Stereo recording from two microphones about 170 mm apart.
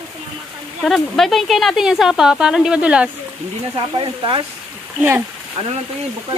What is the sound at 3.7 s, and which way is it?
Speech, 30° right (ahead or behind).